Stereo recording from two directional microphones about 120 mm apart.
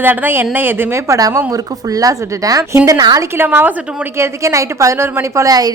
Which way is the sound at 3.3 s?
20° right (ahead or behind).